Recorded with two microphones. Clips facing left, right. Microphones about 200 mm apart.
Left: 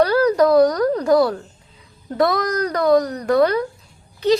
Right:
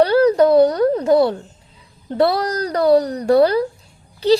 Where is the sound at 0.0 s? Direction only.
30° right (ahead or behind).